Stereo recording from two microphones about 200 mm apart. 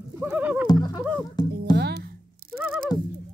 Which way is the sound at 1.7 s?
55° right (ahead or behind).